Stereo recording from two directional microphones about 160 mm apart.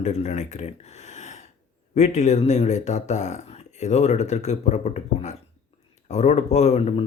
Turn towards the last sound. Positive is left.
turn(degrees=45)  # may be behind; listen again after turning